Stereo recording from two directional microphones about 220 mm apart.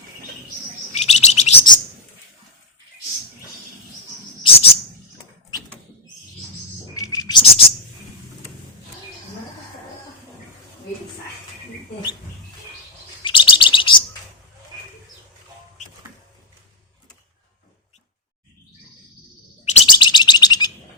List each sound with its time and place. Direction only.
0.9 s chirp: 30° left (ahead or behind)
4.4 s bird vocalization: 25° left (ahead or behind)
6.9 s a sound: 15° left (ahead or behind)
13.2 s chirp: 20° left (ahead or behind)
19.6 s bird: 25° left (ahead or behind)